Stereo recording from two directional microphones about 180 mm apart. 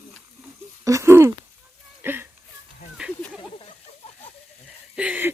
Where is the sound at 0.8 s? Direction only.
15° right (ahead or behind).